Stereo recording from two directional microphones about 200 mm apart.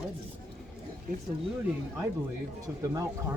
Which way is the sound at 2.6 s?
15° right (ahead or behind).